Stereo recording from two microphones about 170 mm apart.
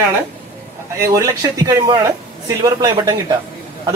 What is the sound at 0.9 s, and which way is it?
Speech, 20° right (ahead or behind).